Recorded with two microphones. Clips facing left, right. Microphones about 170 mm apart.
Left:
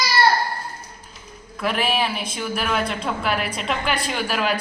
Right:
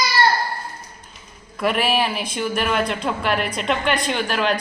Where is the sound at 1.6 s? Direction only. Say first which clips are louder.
Right 2 dB; centre (ahead or behind).